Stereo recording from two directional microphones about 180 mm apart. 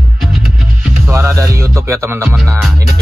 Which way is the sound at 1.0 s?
15° right (ahead or behind).